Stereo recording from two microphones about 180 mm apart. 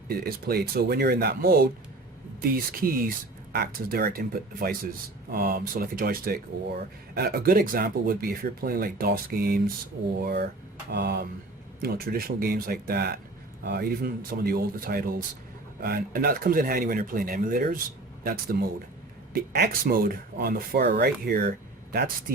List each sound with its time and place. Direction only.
0.1 s speech: 55° right (ahead or behind)
10.2 s speech: 65° right (ahead or behind)